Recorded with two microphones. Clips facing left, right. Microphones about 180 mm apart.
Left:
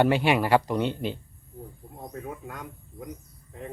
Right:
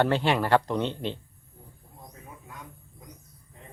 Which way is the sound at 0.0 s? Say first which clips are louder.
Left 2 dB; 10° left (ahead or behind).